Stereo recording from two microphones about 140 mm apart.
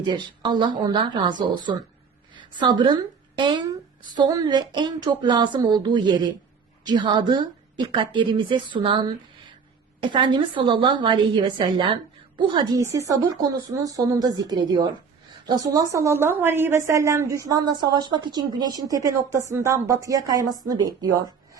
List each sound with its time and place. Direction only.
0.0 s a woman's voice: 35° right (ahead or behind)